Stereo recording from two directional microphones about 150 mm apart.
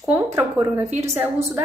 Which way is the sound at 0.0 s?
15° right (ahead or behind).